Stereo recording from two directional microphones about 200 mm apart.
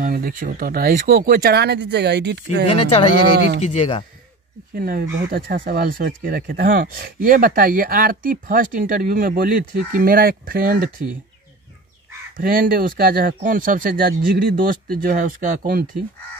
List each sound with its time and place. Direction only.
0.0 s speech: 45° right (ahead or behind)
2.7 s speech: 30° left (ahead or behind)
4.7 s speech: 45° right (ahead or behind)
12.4 s speech: 45° right (ahead or behind)